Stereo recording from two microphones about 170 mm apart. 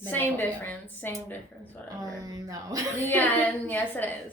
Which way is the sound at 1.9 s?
20° right (ahead or behind).